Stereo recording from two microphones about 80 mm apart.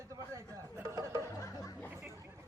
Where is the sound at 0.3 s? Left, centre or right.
Right.